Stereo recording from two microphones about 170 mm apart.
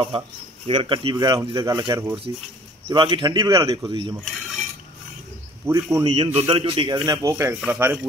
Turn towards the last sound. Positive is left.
turn(degrees=-15)  # may be behind; listen again after turning